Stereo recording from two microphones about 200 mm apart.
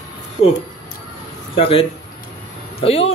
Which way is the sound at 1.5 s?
30° left (ahead or behind).